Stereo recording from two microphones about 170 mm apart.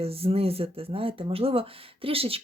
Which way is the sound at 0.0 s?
35° right (ahead or behind).